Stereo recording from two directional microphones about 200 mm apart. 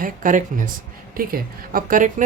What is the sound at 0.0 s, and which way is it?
Speech, 40° right (ahead or behind).